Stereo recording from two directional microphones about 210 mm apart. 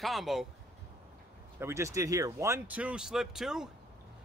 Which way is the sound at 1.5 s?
15° right (ahead or behind).